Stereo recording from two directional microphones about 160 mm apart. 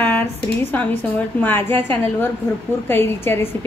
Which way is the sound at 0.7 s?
10° left (ahead or behind).